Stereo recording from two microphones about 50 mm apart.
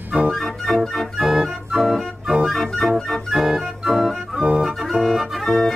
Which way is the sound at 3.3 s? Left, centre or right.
Centre.